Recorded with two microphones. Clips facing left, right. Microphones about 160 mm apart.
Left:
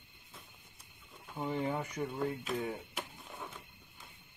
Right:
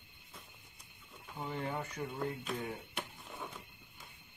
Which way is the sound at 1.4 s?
10° left (ahead or behind).